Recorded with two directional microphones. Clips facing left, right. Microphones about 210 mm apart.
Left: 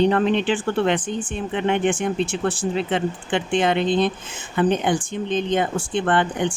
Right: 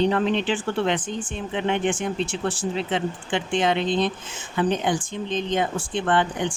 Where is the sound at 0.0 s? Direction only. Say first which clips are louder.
Left 3 dB; 55° left (ahead or behind).